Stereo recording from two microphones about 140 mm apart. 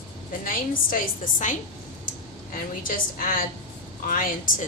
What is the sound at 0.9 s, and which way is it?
Speech, 70° left (ahead or behind).